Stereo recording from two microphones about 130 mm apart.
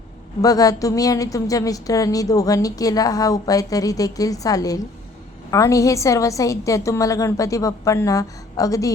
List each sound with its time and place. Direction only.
0.4 s a woman's voice: 30° left (ahead or behind)